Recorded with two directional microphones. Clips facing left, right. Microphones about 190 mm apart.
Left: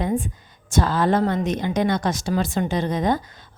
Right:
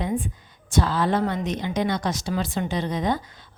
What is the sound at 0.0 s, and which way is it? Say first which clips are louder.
A woman's voice: left 3 dB; 45° left (ahead or behind).